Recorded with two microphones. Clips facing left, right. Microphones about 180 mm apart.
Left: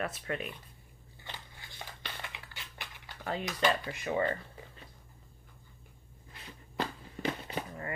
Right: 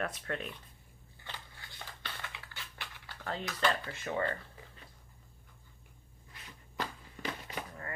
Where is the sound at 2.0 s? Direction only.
15° left (ahead or behind).